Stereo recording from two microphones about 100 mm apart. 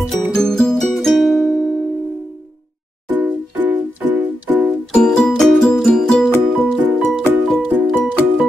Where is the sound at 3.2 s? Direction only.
15° right (ahead or behind).